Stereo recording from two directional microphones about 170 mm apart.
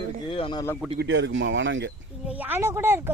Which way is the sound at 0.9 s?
90° right.